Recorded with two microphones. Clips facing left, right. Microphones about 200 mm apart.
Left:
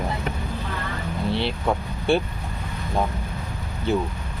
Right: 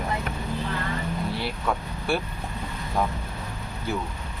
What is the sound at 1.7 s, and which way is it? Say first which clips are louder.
Speech: left 3 dB; 25° left (ahead or behind).